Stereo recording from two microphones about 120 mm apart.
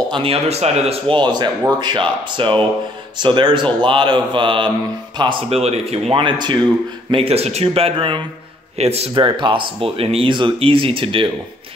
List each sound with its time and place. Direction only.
0.1 s speech: 50° right (ahead or behind)
5.5 s speech: 55° right (ahead or behind); by 6.6 s 40° right (ahead or behind)
7.1 s speech: 55° right (ahead or behind)
8.7 s a man's voice: 60° right (ahead or behind)
9.1 s speech: 40° right (ahead or behind)